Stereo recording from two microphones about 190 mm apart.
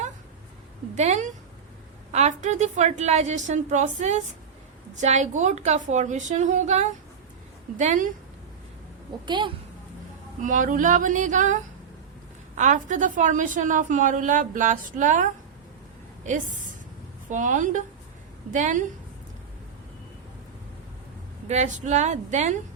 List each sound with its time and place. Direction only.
0.9 s a woman's voice: 40° right (ahead or behind)
9.2 s a woman's voice: 25° right (ahead or behind)
10.4 s a woman's voice: 45° right (ahead or behind)
12.5 s a woman's voice: 40° right (ahead or behind)
21.4 s a woman's voice: 35° right (ahead or behind)